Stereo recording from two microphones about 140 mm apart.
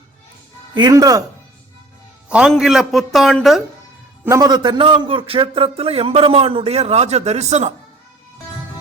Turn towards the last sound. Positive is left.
turn(degrees=-50)  # may be behind; listen again after turning